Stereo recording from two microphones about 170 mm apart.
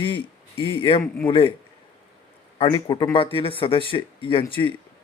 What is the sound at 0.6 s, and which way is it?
Speech, 30° left (ahead or behind).